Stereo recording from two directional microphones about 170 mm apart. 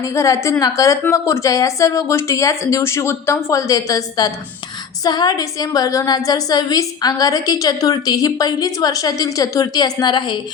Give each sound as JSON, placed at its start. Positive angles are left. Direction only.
{"t": 0.0, "sound": "a woman's voice", "side_deg": 20}